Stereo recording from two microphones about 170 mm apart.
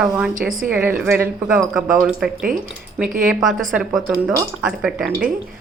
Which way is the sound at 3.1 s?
50° right (ahead or behind).